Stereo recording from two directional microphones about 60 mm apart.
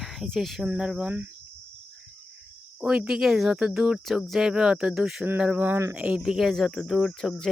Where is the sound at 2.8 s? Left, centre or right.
Centre.